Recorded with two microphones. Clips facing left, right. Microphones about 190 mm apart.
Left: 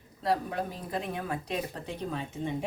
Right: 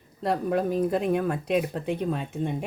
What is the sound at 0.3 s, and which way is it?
Speech, 55° right (ahead or behind).